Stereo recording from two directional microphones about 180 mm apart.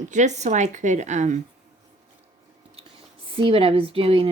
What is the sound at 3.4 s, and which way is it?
Speech, 30° right (ahead or behind).